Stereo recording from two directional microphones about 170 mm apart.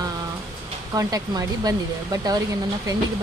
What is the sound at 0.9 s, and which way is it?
Speech, 20° right (ahead or behind).